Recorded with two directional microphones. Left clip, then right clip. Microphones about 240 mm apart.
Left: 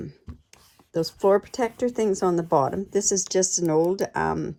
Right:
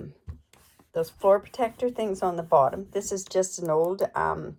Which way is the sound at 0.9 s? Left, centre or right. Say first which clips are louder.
Left 1 dB; left.